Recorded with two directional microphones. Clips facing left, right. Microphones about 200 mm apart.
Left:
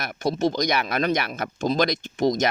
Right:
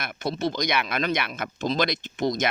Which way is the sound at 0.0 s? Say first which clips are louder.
Left 4 dB; 40° left (ahead or behind).